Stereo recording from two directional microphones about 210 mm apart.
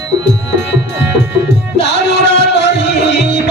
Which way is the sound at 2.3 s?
50° left (ahead or behind).